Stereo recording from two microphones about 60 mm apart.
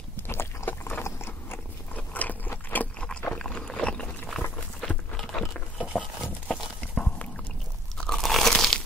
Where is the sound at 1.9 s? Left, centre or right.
Left.